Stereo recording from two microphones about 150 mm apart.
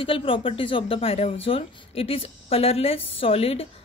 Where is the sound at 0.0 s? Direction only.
35° left (ahead or behind).